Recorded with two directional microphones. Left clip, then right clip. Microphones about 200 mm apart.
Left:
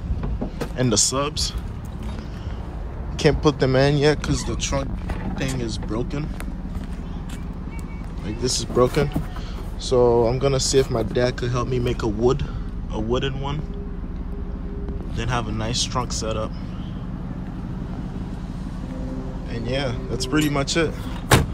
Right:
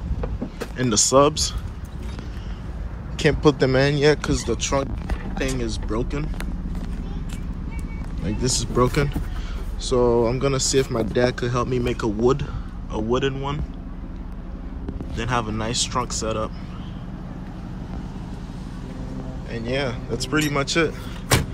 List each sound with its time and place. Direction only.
0.7 s speech: 25° left (ahead or behind)
1.1 s speech: centre (ahead or behind)
3.3 s speech: 10° left (ahead or behind)
8.3 s speech: 15° left (ahead or behind)
15.1 s speech: 10° left (ahead or behind)
19.5 s speech: 10° left (ahead or behind)